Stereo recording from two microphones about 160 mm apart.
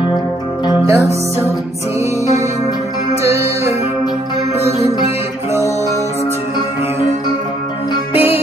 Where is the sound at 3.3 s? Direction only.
40° left (ahead or behind).